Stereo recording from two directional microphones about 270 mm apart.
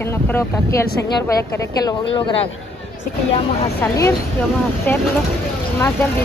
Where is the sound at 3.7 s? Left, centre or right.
Centre.